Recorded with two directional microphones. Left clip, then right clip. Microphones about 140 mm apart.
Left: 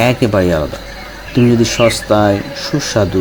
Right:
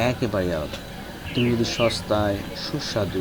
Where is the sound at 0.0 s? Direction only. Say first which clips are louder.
Left 11 dB; 5° left (ahead or behind).